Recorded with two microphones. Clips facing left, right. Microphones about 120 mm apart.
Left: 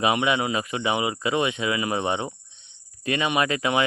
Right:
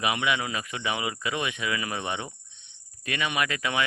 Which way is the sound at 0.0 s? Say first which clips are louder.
Left 5 dB; 30° left (ahead or behind).